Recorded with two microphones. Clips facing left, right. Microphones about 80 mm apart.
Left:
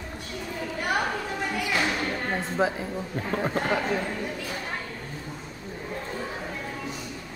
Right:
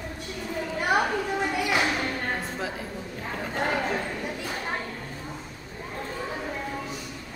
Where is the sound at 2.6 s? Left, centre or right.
Left.